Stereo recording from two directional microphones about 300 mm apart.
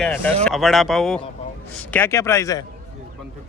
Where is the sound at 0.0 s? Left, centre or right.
Centre.